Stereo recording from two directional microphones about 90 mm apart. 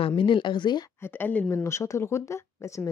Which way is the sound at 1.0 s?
25° left (ahead or behind).